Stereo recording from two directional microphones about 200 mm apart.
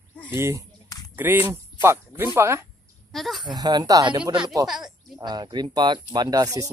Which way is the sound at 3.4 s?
20° right (ahead or behind).